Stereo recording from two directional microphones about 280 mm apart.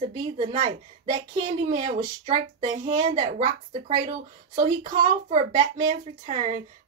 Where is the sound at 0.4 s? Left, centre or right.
Right.